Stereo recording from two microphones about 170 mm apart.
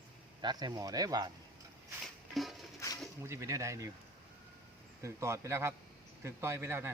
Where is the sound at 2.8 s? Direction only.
20° left (ahead or behind).